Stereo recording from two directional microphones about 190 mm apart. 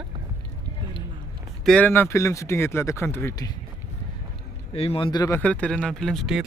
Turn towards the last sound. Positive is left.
turn(degrees=0)  # may be behind; listen again after turning